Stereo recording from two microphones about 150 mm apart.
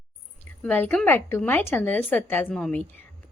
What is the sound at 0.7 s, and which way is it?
A woman's voice, 15° left (ahead or behind).